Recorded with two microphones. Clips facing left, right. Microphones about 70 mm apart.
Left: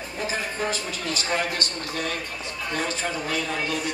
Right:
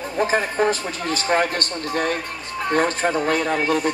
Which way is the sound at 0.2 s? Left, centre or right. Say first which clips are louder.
Right 9 dB; right.